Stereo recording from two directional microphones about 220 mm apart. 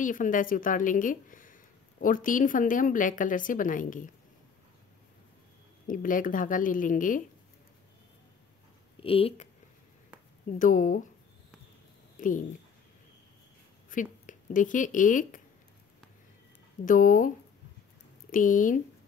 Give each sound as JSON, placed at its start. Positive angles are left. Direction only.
{"t": 0.0, "sound": "a woman's voice", "side_deg": 35}
{"t": 5.9, "sound": "a woman's voice", "side_deg": 40}
{"t": 9.0, "sound": "speech", "side_deg": 25}
{"t": 10.6, "sound": "a woman's voice", "side_deg": 40}
{"t": 12.2, "sound": "speech", "side_deg": 35}
{"t": 13.8, "sound": "speech", "side_deg": 35}
{"t": 16.8, "sound": "a woman's voice", "side_deg": 35}
{"t": 18.3, "sound": "a woman's voice", "side_deg": 35}